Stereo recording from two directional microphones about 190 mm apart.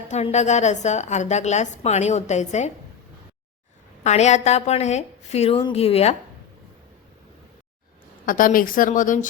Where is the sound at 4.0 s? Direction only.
35° left (ahead or behind).